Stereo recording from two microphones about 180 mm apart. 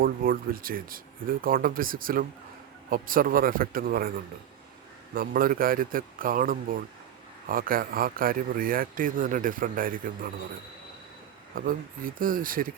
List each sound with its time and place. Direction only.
0.0 s speech: 55° right (ahead or behind)
5.1 s speech: 55° right (ahead or behind)
11.5 s speech: 50° right (ahead or behind)